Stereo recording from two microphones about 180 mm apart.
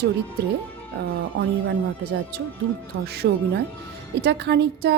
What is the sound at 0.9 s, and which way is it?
Speech, 80° right.